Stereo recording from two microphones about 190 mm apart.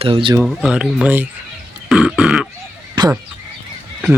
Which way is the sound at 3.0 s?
20° right (ahead or behind).